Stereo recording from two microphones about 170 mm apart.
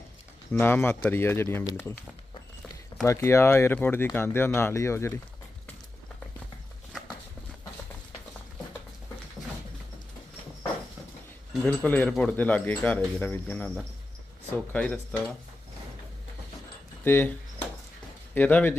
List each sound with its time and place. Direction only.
0.5 s speech: 15° left (ahead or behind)
3.1 s speech: 15° left (ahead or behind)
9.4 s a sound: 25° left (ahead or behind)
11.6 s speech: 10° left (ahead or behind)
17.0 s speech: 10° left (ahead or behind)
18.3 s speech: 10° left (ahead or behind)